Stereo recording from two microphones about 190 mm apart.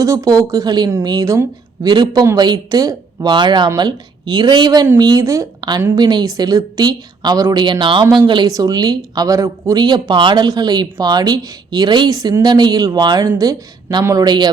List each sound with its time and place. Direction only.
0.0 s a woman's voice: 15° right (ahead or behind)